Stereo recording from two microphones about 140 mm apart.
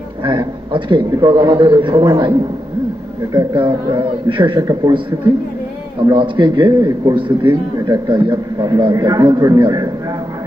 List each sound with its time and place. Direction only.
0.2 s a man's voice: 35° right (ahead or behind)
3.3 s a man's voice: 35° right (ahead or behind)
6.1 s a man's voice: 35° right (ahead or behind)
7.2 s a man's voice: 35° right (ahead or behind)